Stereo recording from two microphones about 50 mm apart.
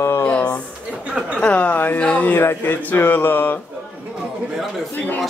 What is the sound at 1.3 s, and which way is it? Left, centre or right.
Speech, left.